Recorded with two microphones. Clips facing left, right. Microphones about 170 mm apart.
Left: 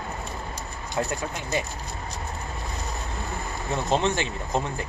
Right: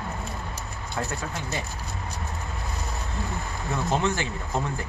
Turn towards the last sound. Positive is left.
turn(degrees=20)  # may be behind; listen again after turning